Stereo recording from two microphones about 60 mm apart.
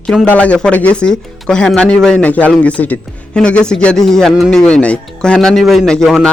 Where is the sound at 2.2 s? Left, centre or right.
Left.